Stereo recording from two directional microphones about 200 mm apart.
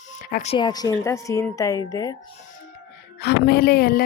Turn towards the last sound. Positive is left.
turn(degrees=50)  # may be behind; listen again after turning